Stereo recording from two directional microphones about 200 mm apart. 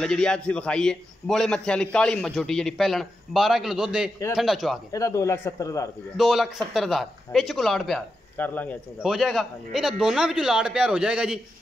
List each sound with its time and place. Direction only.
0.0 s speech: 5° left (ahead or behind)
4.9 s speech: 15° left (ahead or behind)
6.1 s speech: centre (ahead or behind)